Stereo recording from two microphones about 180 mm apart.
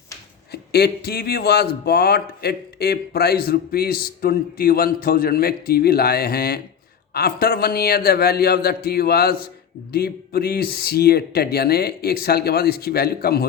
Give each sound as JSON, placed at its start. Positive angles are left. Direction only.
{"t": 0.5, "sound": "speech", "side_deg": 65}